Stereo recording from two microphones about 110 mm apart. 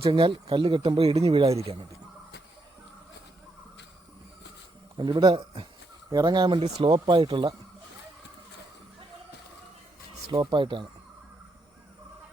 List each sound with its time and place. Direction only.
0.0 s speech: 55° right (ahead or behind)
4.9 s speech: 45° right (ahead or behind)
10.4 s speech: 45° right (ahead or behind)